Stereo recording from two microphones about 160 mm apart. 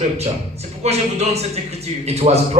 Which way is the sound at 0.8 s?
40° right (ahead or behind).